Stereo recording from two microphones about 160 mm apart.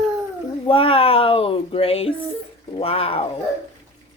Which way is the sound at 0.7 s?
35° left (ahead or behind).